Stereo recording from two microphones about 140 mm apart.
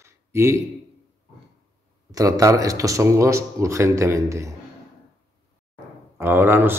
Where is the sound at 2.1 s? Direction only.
25° right (ahead or behind).